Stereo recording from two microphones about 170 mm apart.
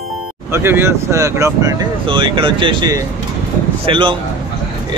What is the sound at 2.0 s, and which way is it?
Speech, 30° right (ahead or behind).